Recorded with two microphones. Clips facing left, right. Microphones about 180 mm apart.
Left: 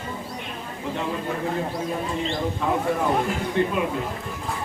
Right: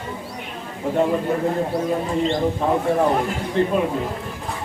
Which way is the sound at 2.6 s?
35° right (ahead or behind).